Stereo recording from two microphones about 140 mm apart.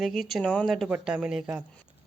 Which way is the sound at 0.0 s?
Centre (ahead or behind).